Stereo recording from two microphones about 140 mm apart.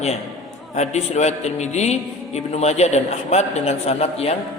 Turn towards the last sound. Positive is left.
turn(degrees=50)  # may be behind; listen again after turning